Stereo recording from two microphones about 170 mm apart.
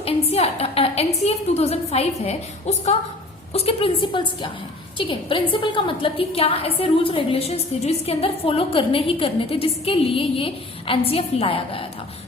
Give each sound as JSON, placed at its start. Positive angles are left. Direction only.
{"t": 0.0, "sound": "a woman's voice", "side_deg": 40}